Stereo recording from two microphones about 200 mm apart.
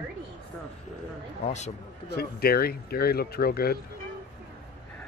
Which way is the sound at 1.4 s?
35° left (ahead or behind).